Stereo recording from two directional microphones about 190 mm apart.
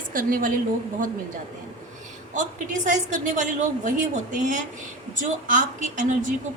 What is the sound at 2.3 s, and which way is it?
A woman's voice, 40° right (ahead or behind).